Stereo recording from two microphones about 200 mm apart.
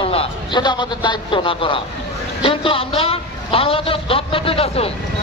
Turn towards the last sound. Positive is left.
turn(degrees=30)  # may be behind; listen again after turning